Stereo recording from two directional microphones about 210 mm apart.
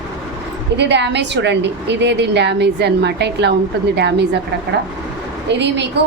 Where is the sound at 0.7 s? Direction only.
55° right (ahead or behind).